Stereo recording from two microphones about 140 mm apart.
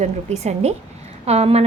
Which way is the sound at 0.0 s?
50° right (ahead or behind).